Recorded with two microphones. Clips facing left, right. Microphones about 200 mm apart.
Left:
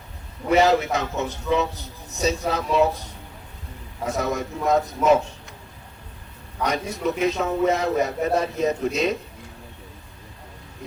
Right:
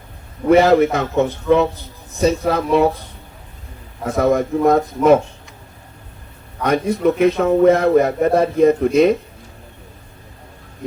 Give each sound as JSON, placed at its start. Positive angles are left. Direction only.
{"t": 0.4, "sound": "a man's voice", "side_deg": -55}
{"t": 4.0, "sound": "a man's voice", "side_deg": -55}
{"t": 6.6, "sound": "a man's voice", "side_deg": -55}